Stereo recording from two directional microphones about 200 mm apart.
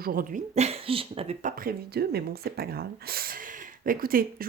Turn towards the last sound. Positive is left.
turn(degrees=-45)  # may be behind; listen again after turning